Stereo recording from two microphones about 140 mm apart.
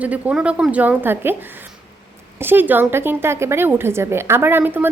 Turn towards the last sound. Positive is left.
turn(degrees=-15)  # may be behind; listen again after turning